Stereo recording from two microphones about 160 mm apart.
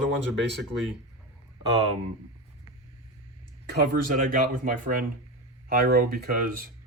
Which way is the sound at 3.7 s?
70° right (ahead or behind).